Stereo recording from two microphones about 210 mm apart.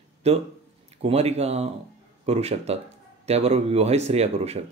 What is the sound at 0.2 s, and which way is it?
Speech, 30° right (ahead or behind).